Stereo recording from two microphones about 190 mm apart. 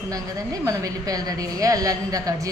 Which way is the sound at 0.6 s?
20° right (ahead or behind).